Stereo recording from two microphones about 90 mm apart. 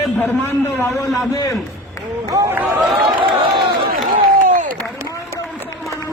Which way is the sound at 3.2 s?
70° right (ahead or behind).